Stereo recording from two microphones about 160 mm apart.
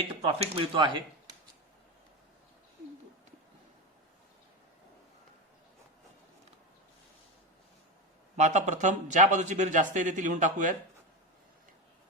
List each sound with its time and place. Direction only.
0.1 s speech: 35° right (ahead or behind)
8.4 s speech: 45° right (ahead or behind)